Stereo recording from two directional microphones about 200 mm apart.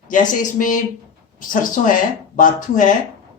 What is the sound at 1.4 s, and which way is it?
Speech, 40° left (ahead or behind).